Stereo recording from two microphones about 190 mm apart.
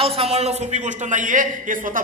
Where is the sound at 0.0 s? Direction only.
30° right (ahead or behind).